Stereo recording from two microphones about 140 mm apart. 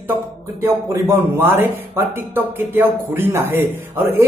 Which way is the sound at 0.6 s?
20° right (ahead or behind).